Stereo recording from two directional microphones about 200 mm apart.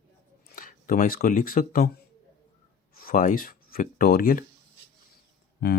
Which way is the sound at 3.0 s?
45° left (ahead or behind).